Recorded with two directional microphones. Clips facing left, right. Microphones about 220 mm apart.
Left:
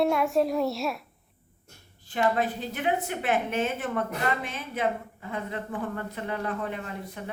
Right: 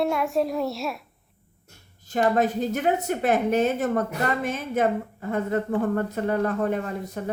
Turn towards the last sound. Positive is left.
turn(degrees=-45)  # may be behind; listen again after turning